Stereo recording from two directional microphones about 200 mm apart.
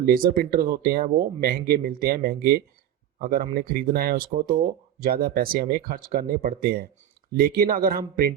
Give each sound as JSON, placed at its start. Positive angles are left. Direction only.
{"t": 0.0, "sound": "speech", "side_deg": -45}